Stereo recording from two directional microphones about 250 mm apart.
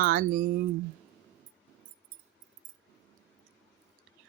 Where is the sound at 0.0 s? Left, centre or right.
Right.